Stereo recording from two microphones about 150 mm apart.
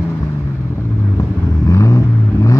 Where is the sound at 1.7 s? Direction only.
20° left (ahead or behind).